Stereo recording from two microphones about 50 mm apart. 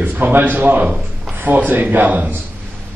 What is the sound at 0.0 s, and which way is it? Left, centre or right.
A man's voice, right.